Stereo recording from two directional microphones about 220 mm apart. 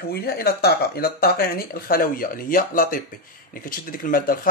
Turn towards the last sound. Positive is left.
turn(degrees=40)  # may be behind; listen again after turning